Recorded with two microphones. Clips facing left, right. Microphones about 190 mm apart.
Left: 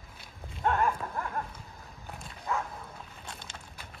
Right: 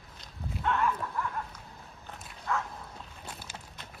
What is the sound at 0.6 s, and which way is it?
Clip-clop, 45° left (ahead or behind).